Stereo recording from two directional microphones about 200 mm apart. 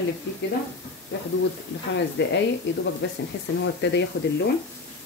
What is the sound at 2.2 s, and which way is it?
Speech, 60° left (ahead or behind).